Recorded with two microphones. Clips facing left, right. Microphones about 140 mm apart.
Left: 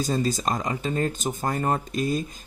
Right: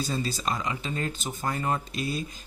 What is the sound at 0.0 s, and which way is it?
Speech, 45° left (ahead or behind).